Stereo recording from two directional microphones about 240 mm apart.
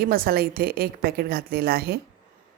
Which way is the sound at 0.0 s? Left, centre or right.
Right.